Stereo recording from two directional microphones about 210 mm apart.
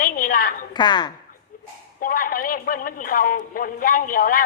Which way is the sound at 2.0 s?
40° left (ahead or behind).